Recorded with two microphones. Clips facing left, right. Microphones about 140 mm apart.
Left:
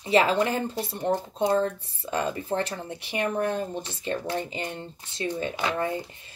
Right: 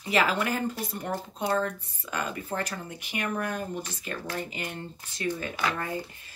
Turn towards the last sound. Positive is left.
turn(degrees=25)  # may be behind; listen again after turning